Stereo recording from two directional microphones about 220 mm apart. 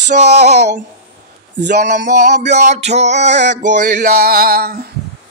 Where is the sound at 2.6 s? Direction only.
30° right (ahead or behind).